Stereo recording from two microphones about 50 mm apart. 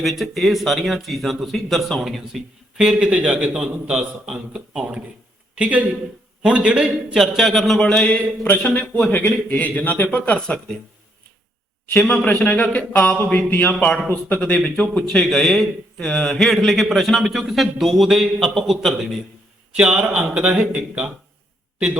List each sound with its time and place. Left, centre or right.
0.0 s a man's voice: centre
3.0 s speech: right
3.5 s a man's voice: centre
5.5 s speech: right
7.1 s a man's voice: centre
7.8 s a man's voice: centre
11.9 s a man's voice: left
14.3 s a man's voice: left; by 19.2 s centre
19.7 s a man's voice: centre